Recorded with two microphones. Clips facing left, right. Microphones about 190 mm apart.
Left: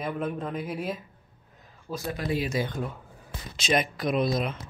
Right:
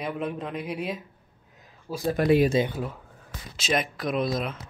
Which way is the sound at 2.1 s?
60° right (ahead or behind).